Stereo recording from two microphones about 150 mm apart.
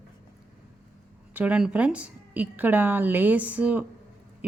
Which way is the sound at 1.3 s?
10° right (ahead or behind).